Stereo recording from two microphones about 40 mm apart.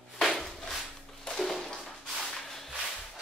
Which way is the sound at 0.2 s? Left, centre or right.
Centre.